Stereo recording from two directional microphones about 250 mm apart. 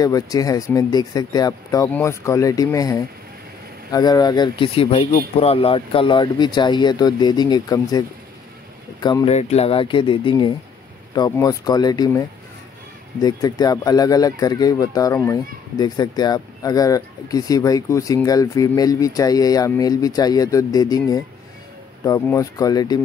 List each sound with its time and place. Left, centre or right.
0.0 s speech: centre
9.0 s speech: centre